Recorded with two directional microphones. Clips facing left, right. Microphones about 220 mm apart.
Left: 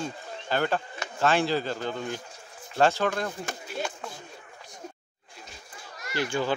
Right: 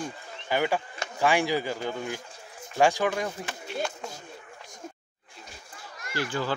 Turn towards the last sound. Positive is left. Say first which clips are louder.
# left 2 dB
turn(degrees=20)  # may be behind; listen again after turning